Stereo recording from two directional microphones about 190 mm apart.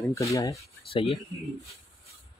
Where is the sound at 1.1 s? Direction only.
Centre (ahead or behind).